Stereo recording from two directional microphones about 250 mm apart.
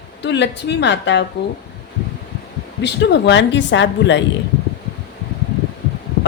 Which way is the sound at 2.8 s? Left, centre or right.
Left.